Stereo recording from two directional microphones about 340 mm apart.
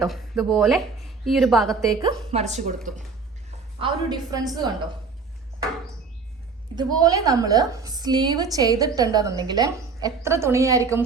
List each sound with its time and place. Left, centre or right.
0.0 s a woman's voice: centre
2.0 s a woman's voice: centre
3.8 s a woman's voice: centre
6.7 s a woman's voice: centre